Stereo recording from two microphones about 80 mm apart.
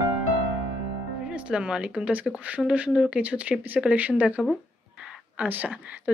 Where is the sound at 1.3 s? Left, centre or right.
Centre.